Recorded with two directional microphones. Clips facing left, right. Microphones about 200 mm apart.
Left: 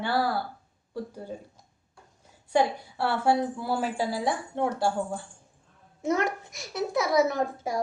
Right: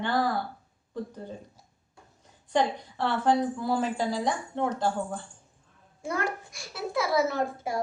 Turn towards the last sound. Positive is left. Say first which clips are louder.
# left 1 dB
turn(degrees=15)  # may be behind; listen again after turning